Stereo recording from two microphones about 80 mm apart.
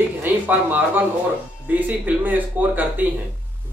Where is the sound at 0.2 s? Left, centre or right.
Right.